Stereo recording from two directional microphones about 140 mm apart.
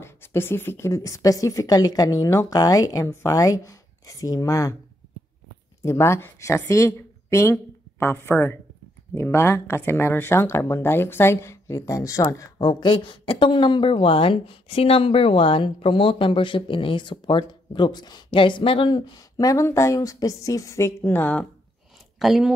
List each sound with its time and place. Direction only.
0.0 s a woman's voice: 15° left (ahead or behind)
5.8 s speech: 20° left (ahead or behind)
22.2 s speech: 5° right (ahead or behind)